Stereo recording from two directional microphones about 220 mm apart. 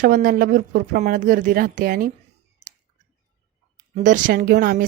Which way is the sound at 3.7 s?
35° right (ahead or behind).